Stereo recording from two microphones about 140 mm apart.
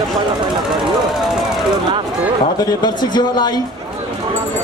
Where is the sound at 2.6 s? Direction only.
30° left (ahead or behind).